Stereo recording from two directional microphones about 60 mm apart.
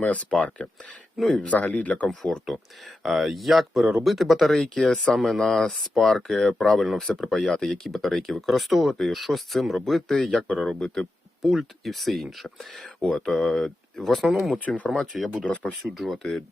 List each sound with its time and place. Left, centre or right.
0.0 s speech: centre
1.1 s speech: centre
1.4 s speech: left
2.0 s speech: centre
15.4 s speech: centre
15.8 s speech: centre